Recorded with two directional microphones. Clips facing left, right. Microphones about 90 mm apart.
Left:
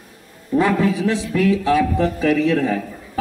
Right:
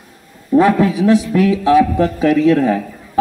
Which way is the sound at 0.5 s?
20° right (ahead or behind).